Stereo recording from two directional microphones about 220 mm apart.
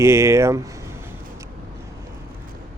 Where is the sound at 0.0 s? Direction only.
10° right (ahead or behind).